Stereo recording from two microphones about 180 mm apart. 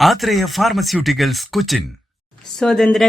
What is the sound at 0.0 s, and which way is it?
Speech, centre (ahead or behind).